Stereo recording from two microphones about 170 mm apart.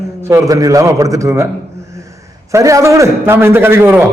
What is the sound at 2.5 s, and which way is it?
A man's voice, 20° right (ahead or behind).